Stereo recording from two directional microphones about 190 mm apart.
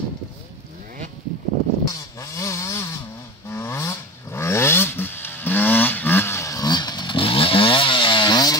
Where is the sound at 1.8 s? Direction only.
15° left (ahead or behind).